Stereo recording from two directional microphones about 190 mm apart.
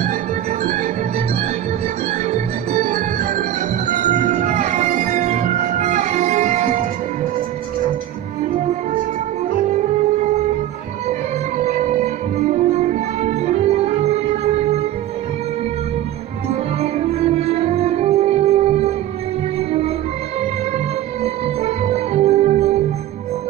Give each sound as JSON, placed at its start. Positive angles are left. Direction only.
{"t": 2.3, "sound": "music", "side_deg": -40}
{"t": 9.7, "sound": "music", "side_deg": -40}
{"t": 16.8, "sound": "music", "side_deg": -35}
{"t": 21.2, "sound": "music", "side_deg": -35}